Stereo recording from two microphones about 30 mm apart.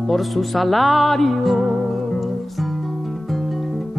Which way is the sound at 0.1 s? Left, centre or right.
Centre.